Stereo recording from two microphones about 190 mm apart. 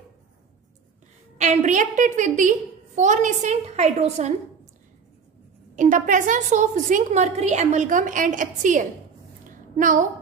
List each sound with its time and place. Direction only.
1.4 s a woman's voice: 40° right (ahead or behind)
5.8 s a woman's voice: 40° right (ahead or behind)